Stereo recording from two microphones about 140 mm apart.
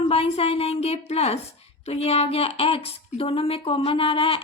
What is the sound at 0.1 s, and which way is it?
Speech, 45° left (ahead or behind).